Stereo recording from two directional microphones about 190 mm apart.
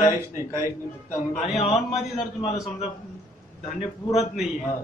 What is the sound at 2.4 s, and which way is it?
Speech, 35° left (ahead or behind).